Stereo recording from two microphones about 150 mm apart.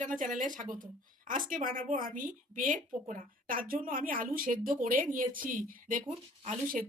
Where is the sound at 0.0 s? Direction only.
60° right (ahead or behind).